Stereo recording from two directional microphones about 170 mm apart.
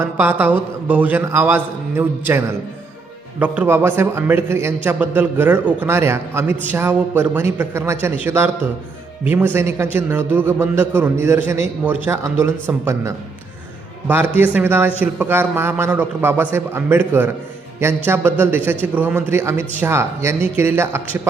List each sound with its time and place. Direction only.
0.0 s a man's voice: 10° right (ahead or behind)